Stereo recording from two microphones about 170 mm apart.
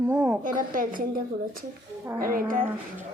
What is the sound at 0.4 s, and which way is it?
Speech, 55° right (ahead or behind).